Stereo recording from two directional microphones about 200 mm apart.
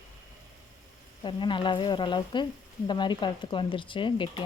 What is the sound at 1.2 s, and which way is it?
Speech, 25° left (ahead or behind).